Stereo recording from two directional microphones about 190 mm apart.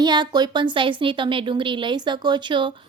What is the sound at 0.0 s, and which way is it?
A woman's voice, 20° right (ahead or behind).